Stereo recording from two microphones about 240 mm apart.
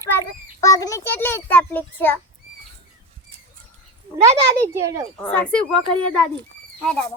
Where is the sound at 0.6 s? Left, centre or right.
Centre.